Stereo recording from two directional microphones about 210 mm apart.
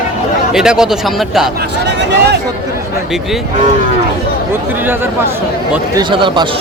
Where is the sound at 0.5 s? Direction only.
5° right (ahead or behind).